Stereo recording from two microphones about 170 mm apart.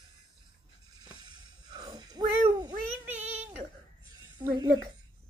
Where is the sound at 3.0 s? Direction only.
10° right (ahead or behind).